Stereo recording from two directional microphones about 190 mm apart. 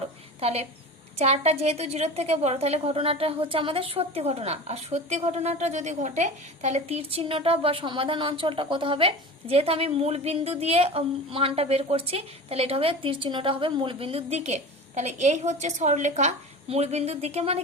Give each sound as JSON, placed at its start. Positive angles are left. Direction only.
{"t": 0.3, "sound": "a woman's voice", "side_deg": -30}